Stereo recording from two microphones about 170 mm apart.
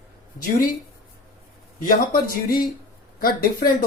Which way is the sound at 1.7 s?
55° left (ahead or behind).